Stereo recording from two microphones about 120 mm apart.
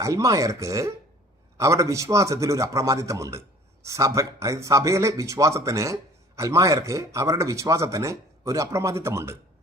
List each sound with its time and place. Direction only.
0.0 s speech: 25° right (ahead or behind)